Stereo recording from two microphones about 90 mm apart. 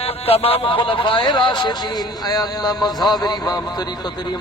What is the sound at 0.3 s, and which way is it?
A man's voice, 90° left.